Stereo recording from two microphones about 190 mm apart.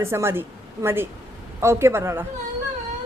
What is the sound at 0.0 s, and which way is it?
A woman's voice, 15° right (ahead or behind).